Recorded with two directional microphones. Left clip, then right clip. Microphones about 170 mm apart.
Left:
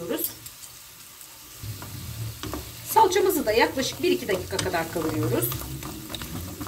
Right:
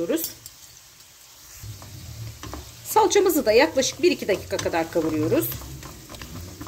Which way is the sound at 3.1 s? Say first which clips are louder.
Right 4 dB; 70° right (ahead or behind).